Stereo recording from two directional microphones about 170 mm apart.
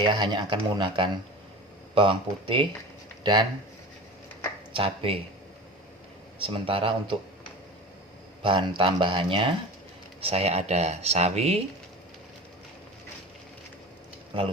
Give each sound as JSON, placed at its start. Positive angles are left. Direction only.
{"t": 0.0, "sound": "speech", "side_deg": -25}
{"t": 4.7, "sound": "speech", "side_deg": -30}
{"t": 6.4, "sound": "speech", "side_deg": -30}
{"t": 8.4, "sound": "speech", "side_deg": -30}